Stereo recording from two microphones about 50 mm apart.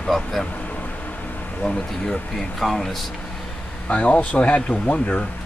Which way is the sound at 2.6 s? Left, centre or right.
Centre.